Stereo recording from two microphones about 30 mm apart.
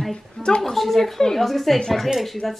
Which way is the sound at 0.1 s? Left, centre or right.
Left.